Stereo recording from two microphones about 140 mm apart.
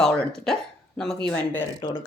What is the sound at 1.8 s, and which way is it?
Speech, 30° left (ahead or behind).